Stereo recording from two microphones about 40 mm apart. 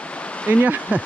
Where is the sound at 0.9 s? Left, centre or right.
Right.